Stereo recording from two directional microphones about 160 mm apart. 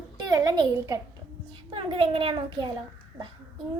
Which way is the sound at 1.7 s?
35° right (ahead or behind).